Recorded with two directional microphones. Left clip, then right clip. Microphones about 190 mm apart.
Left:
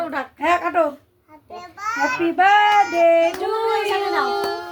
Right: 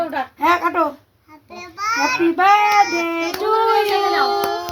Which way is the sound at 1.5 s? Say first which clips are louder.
Right 4 dB; 10° left (ahead or behind).